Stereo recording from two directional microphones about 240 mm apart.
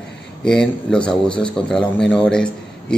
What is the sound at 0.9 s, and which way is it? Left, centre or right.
Speech, centre.